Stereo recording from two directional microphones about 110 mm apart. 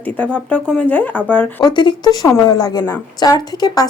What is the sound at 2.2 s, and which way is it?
Speech, 30° left (ahead or behind).